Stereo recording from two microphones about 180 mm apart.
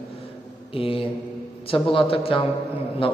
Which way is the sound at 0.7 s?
30° left (ahead or behind).